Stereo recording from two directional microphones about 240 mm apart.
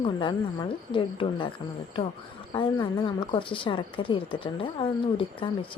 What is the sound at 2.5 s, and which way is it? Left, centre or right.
Speech, centre.